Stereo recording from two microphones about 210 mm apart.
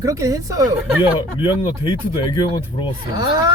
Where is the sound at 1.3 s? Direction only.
25° left (ahead or behind).